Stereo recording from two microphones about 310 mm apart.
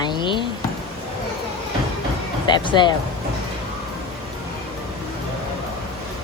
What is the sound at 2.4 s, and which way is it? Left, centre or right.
Speech, centre.